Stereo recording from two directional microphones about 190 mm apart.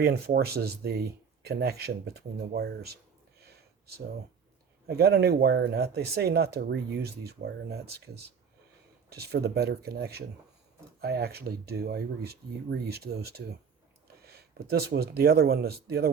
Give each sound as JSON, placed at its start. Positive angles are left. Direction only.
{"t": 0.0, "sound": "speech", "side_deg": -55}
{"t": 4.9, "sound": "speech", "side_deg": -55}